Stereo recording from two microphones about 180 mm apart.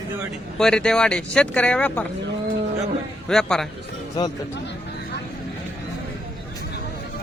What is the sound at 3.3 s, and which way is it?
Speech, 5° left (ahead or behind).